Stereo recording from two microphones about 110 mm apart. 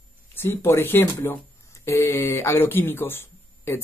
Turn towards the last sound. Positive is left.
turn(degrees=20)  # may be behind; listen again after turning